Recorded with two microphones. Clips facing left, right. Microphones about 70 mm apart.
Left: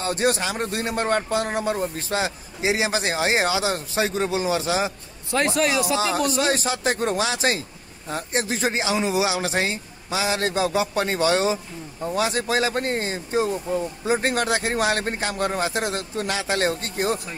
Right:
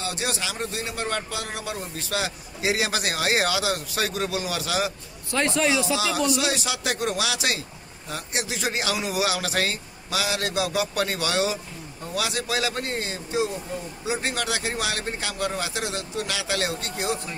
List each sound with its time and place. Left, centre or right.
0.0 s speech: left
5.4 s speech: centre
5.9 s a man's voice: left